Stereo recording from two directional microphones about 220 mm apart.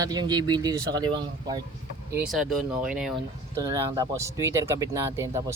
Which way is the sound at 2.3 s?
Centre (ahead or behind).